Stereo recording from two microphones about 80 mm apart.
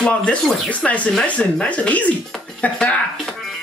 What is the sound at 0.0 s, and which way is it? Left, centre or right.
Speech, centre.